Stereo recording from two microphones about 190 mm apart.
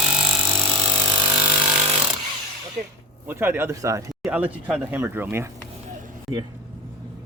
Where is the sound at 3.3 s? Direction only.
10° right (ahead or behind).